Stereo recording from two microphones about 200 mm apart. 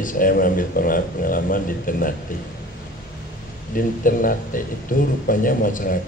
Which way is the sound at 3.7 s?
45° left (ahead or behind).